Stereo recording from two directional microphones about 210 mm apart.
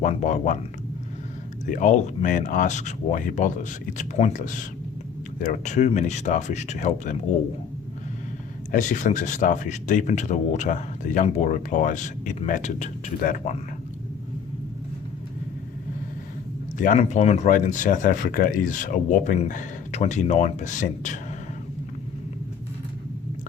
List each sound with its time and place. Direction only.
0.0 s speech: 35° left (ahead or behind)
1.6 s speech: 35° left (ahead or behind)
8.7 s speech: 35° left (ahead or behind)
16.7 s speech: 35° left (ahead or behind)